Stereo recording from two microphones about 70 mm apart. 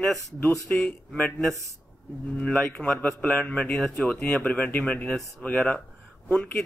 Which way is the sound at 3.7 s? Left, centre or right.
Centre.